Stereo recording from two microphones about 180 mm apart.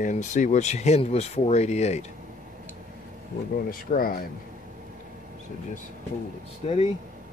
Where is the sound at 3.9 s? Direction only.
55° left (ahead or behind).